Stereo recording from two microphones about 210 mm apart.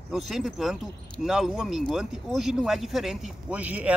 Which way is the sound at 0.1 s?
Centre (ahead or behind).